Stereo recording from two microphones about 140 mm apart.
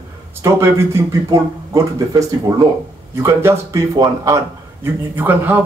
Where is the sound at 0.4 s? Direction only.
20° right (ahead or behind).